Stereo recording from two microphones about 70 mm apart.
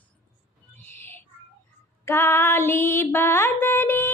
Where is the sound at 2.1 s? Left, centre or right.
Left.